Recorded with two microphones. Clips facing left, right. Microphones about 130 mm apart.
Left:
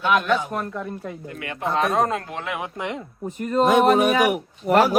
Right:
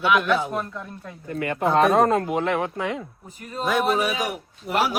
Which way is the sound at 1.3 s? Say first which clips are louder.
Right 6 dB; 45° right (ahead or behind).